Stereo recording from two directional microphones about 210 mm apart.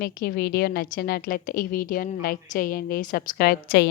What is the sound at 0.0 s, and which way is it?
A woman's voice, 45° left (ahead or behind).